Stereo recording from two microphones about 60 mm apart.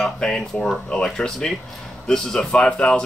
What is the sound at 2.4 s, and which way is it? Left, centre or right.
Speech, centre.